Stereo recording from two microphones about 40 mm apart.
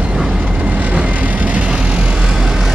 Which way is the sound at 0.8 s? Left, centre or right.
Right.